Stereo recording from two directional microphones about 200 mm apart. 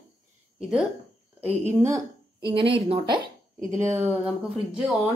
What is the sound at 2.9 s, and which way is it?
Speech, 20° right (ahead or behind).